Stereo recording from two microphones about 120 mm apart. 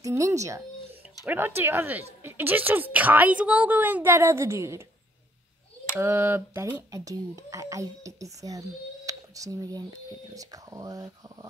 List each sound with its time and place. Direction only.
0.0 s speech: 25° right (ahead or behind)
5.9 s speech: 15° right (ahead or behind)